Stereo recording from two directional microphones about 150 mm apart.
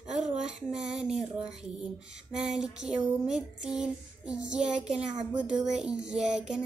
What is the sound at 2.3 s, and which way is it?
Child singing, 5° right (ahead or behind).